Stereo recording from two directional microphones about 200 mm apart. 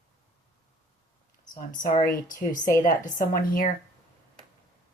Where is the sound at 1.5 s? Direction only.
40° left (ahead or behind).